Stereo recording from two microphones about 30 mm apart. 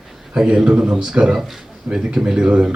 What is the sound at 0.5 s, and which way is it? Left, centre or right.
Speech, right.